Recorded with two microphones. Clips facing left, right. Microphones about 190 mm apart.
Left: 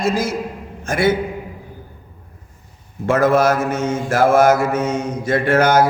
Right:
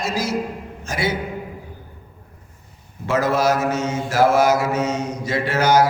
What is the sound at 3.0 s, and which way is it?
Mantra, 55° left (ahead or behind).